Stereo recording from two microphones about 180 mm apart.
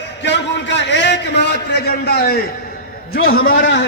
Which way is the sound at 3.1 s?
90° left.